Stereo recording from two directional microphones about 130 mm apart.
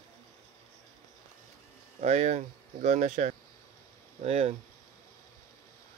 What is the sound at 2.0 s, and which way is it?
Speech, 60° right (ahead or behind).